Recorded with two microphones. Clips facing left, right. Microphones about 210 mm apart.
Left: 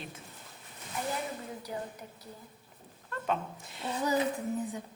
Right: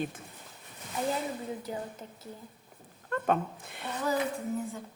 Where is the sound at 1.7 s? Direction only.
25° right (ahead or behind).